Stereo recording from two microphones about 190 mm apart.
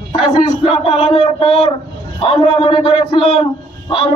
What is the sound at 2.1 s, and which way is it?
A man's voice, 30° left (ahead or behind).